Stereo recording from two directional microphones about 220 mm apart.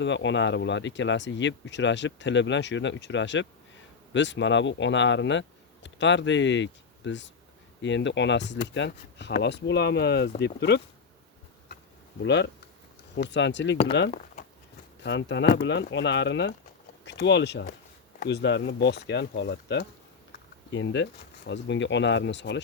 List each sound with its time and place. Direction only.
0.0 s speech: 55° left (ahead or behind)
12.2 s speech: 55° left (ahead or behind)
15.0 s speech: 55° left (ahead or behind)